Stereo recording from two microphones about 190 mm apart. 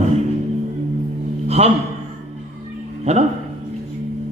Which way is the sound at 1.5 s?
35° right (ahead or behind).